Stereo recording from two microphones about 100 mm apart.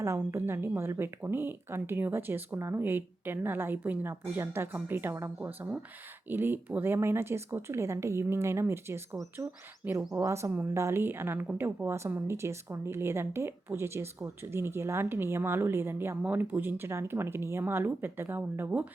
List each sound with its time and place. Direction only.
0.0 s a woman's voice: 25° right (ahead or behind)
10.2 s a woman's voice: 30° right (ahead or behind)